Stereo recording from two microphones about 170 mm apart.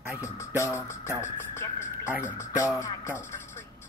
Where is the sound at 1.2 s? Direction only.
15° left (ahead or behind).